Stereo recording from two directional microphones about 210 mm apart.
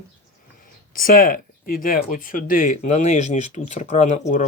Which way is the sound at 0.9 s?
40° left (ahead or behind).